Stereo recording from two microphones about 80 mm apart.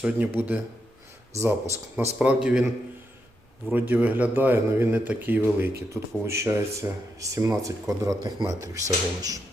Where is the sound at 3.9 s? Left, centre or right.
Centre; by 9.3 s right.